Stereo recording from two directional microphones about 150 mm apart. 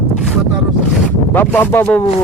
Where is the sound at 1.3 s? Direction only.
15° left (ahead or behind).